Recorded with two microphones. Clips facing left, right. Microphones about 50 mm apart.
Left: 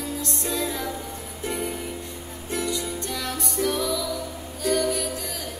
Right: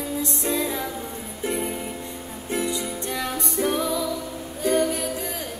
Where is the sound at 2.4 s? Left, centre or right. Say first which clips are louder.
Right 1 dB; centre.